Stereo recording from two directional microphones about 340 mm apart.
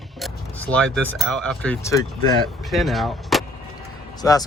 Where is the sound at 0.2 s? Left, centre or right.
Centre.